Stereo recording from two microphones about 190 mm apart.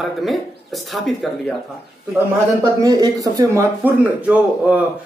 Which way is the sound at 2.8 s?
20° right (ahead or behind).